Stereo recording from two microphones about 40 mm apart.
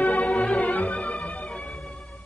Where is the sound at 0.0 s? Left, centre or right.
Left.